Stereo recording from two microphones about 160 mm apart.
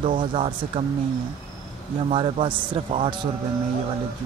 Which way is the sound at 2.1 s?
35° right (ahead or behind).